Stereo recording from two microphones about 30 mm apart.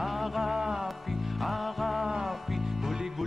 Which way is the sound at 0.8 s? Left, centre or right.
Centre.